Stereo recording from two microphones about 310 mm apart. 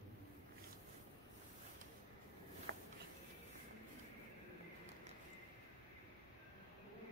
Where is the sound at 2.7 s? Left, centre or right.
Right.